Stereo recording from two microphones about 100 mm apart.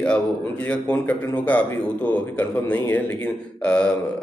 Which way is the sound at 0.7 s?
15° left (ahead or behind).